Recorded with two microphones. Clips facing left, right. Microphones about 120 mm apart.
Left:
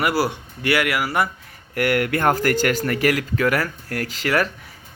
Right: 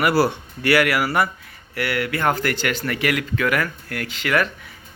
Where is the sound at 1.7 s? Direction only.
50° left (ahead or behind).